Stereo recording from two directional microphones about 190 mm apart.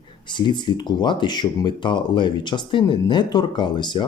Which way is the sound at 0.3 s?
25° left (ahead or behind).